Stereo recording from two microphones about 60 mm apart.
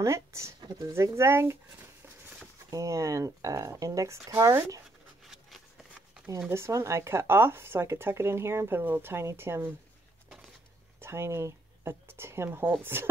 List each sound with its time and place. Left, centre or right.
0.0 s speech: right
2.7 s speech: right
4.4 s speech: right
5.2 s a sound: centre
6.5 s speech: right
9.2 s speech: right
11.0 s speech: right